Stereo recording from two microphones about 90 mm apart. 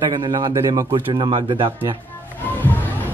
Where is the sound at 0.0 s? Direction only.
50° right (ahead or behind).